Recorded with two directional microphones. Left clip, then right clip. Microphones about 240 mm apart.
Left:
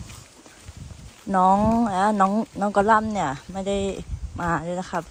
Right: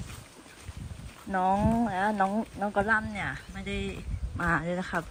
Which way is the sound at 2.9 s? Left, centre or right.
Centre.